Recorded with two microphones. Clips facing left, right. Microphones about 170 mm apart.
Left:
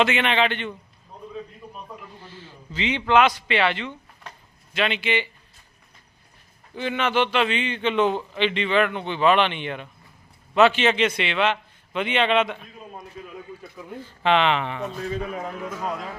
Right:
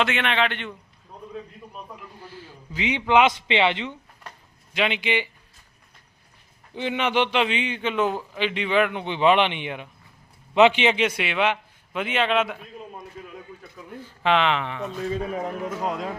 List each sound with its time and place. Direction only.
0.0 s speech: centre (ahead or behind)
2.2 s a man's voice: 10° right (ahead or behind)
6.7 s a man's voice: 15° right (ahead or behind)
14.0 s speech: 5° right (ahead or behind)
15.4 s speech: 20° right (ahead or behind)